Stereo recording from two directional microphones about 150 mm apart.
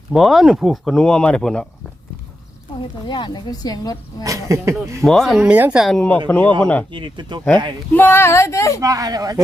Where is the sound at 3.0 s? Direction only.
30° left (ahead or behind).